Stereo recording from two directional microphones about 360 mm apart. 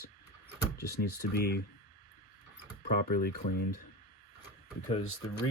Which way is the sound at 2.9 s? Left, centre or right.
Left.